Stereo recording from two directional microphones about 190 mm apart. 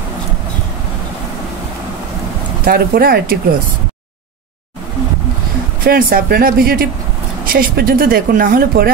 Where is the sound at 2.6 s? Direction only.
50° right (ahead or behind).